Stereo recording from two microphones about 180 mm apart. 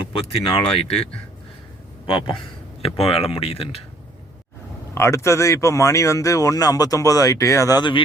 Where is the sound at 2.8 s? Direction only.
35° left (ahead or behind).